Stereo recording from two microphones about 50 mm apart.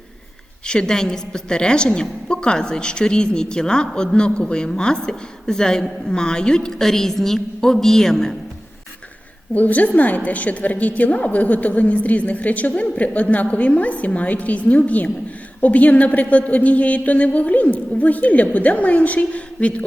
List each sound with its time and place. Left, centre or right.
0.7 s a woman's voice: centre
9.6 s a woman's voice: left